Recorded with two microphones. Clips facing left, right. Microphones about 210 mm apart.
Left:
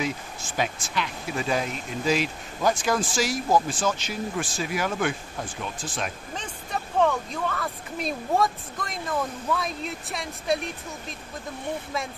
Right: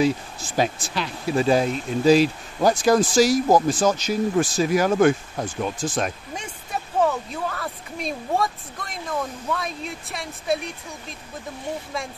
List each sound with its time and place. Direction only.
0.0 s speech: 35° right (ahead or behind)
6.3 s speech: 10° right (ahead or behind)